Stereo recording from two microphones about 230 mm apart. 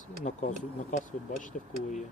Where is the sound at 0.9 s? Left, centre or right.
Left.